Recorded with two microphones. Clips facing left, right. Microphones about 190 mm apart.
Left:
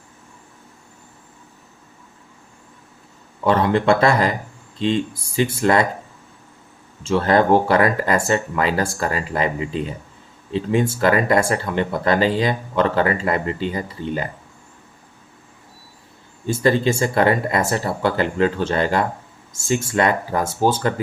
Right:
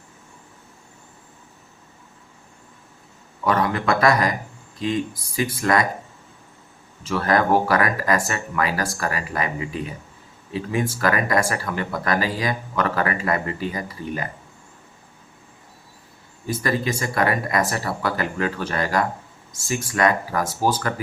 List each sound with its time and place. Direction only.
3.4 s speech: 25° left (ahead or behind)
7.0 s speech: 25° left (ahead or behind)
16.5 s speech: 30° left (ahead or behind)